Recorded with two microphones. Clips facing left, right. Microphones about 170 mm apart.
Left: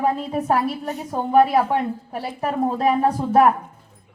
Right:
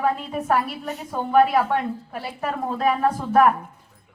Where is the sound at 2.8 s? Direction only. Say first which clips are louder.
Even; 30° left (ahead or behind).